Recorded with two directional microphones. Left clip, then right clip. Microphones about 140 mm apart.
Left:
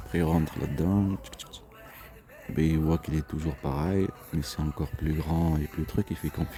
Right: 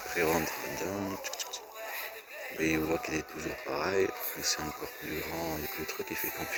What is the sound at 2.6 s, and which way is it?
Speech, 35° left (ahead or behind).